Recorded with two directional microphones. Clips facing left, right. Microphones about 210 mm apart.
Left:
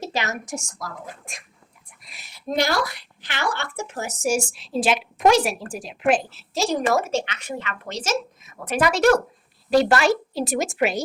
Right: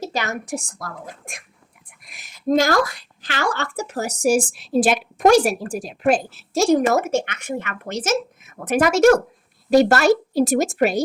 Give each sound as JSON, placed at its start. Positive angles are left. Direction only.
{"t": 0.2, "sound": "speech", "side_deg": -55}
{"t": 4.3, "sound": "speech", "side_deg": -50}